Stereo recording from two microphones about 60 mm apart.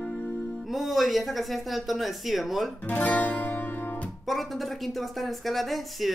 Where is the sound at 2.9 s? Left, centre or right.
Left.